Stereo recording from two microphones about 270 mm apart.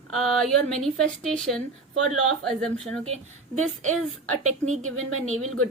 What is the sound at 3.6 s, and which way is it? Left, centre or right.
A woman's voice, right.